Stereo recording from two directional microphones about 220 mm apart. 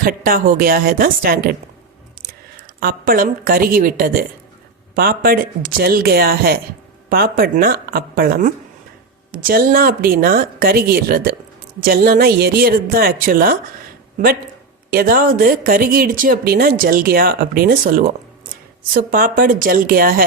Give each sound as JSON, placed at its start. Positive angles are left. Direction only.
{"t": 0.0, "sound": "speech", "side_deg": -40}
{"t": 2.8, "sound": "speech", "side_deg": -40}
{"t": 14.8, "sound": "speech", "side_deg": -40}